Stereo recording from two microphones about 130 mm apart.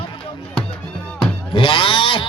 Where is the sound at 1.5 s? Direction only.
40° left (ahead or behind).